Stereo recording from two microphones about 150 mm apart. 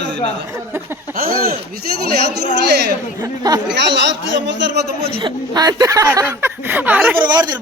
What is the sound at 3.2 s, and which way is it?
Speech, 25° right (ahead or behind).